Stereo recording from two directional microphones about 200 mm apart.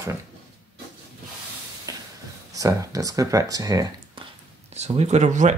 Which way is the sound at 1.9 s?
20° right (ahead or behind).